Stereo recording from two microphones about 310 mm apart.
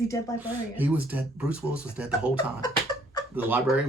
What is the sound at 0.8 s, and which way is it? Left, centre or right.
Speech, centre.